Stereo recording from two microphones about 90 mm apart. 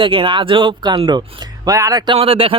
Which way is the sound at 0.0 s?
75° right (ahead or behind).